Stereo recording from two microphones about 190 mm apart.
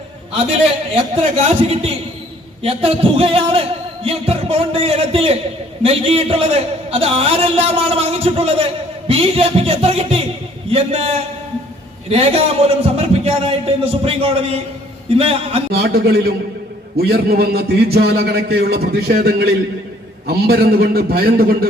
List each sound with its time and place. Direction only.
1.6 s a man's voice: 35° right (ahead or behind)
15.7 s a man's voice: 50° right (ahead or behind)